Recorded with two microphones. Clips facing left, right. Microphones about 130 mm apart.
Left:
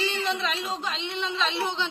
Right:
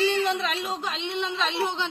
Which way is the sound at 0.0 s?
55° right (ahead or behind).